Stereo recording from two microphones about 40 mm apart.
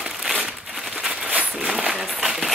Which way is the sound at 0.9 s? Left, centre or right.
Centre.